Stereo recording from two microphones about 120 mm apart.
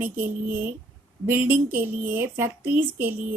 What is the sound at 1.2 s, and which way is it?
A woman's voice, 15° right (ahead or behind).